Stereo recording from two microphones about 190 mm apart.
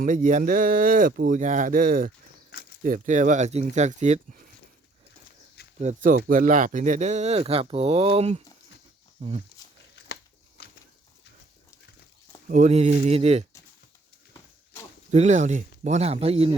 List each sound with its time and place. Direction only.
0.0 s speech: 45° right (ahead or behind)
5.8 s speech: 40° right (ahead or behind)
12.5 s speech: 40° right (ahead or behind)
15.1 s speech: 35° right (ahead or behind)